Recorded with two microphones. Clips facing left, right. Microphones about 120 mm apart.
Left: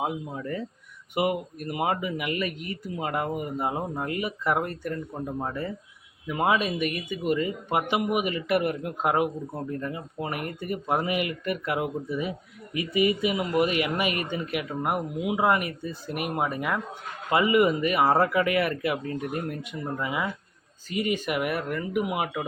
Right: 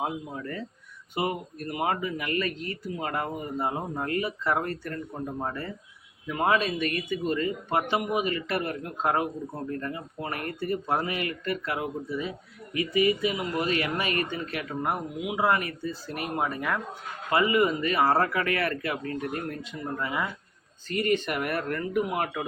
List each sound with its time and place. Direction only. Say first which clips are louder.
0.3 s speech: left 3 dB; 15° left (ahead or behind)
6.2 s speech: left 1 dB; 10° left (ahead or behind)